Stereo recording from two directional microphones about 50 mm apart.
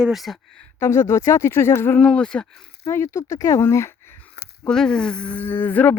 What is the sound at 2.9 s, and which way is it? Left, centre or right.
Speech, left.